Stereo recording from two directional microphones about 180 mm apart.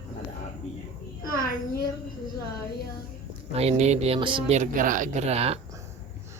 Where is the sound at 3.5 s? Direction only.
35° right (ahead or behind).